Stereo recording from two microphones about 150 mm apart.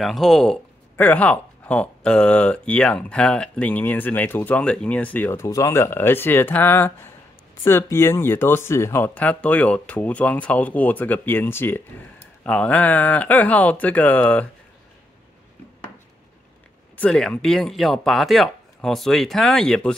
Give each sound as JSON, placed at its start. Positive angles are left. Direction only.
{"t": 0.0, "sound": "speech", "side_deg": 0}
{"t": 16.9, "sound": "speech", "side_deg": 5}